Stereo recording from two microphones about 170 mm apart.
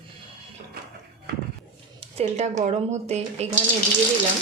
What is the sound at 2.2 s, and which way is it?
Speech, 40° right (ahead or behind).